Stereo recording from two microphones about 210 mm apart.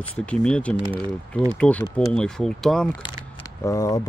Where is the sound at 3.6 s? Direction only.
15° left (ahead or behind).